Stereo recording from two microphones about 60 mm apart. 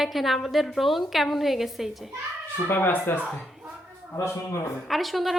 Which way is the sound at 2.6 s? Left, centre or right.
Left.